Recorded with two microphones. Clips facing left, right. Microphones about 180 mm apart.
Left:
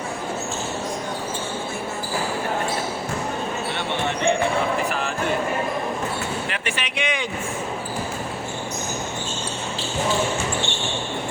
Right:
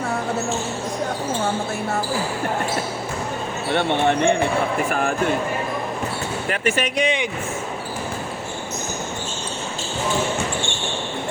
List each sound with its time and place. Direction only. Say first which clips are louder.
3.8 s speech: right 10 dB; 55° right (ahead or behind)
6.5 s speech: right 7 dB; 45° right (ahead or behind)